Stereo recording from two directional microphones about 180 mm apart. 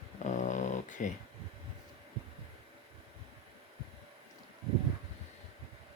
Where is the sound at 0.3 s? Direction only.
45° left (ahead or behind).